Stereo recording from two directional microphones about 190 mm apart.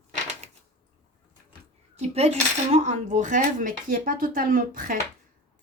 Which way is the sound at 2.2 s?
35° right (ahead or behind).